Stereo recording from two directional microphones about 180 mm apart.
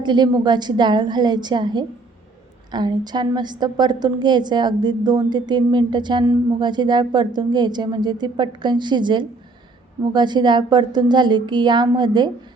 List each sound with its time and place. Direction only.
0.0 s a woman's voice: 25° right (ahead or behind)